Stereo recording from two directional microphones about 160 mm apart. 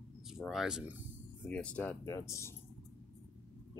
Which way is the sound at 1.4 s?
10° left (ahead or behind).